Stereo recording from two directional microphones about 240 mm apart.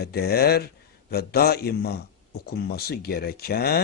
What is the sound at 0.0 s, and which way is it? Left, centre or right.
Speech, left.